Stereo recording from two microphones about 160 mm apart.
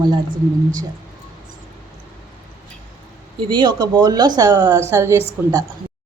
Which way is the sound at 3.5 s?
30° right (ahead or behind).